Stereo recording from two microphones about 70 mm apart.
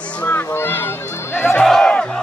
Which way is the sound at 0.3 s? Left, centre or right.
Left.